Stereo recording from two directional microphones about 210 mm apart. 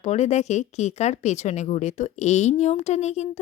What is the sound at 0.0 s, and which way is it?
Speech, 30° left (ahead or behind).